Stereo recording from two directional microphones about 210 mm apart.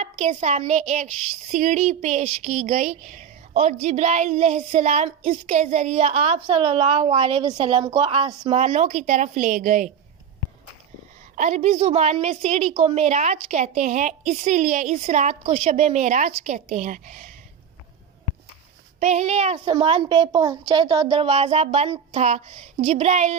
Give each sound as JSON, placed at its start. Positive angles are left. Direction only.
{"t": 0.0, "sound": "a woman's voice", "side_deg": -30}
{"t": 8.6, "sound": "a woman's voice", "side_deg": -35}
{"t": 11.3, "sound": "a woman's voice", "side_deg": -35}
{"t": 18.9, "sound": "speech", "side_deg": -35}